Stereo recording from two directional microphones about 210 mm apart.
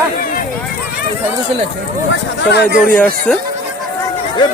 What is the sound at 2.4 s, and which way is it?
Speech, 50° left (ahead or behind).